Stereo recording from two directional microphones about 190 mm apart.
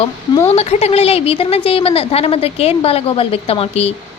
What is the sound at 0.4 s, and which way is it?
A woman's voice, 35° left (ahead or behind).